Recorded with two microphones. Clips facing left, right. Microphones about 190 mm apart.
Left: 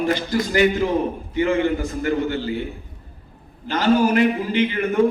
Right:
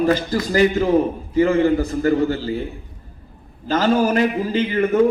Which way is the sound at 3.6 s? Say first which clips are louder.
Even; 45° right (ahead or behind).